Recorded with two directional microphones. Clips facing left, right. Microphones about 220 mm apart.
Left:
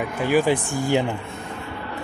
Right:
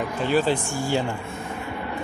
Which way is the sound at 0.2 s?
10° left (ahead or behind).